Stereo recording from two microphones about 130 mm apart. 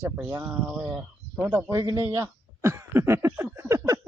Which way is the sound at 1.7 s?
25° right (ahead or behind).